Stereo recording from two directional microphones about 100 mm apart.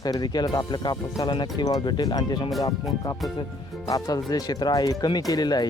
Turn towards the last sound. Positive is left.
turn(degrees=45)  # may be behind; listen again after turning